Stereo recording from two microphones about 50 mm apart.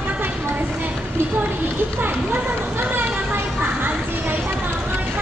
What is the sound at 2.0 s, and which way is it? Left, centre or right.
Speech, right.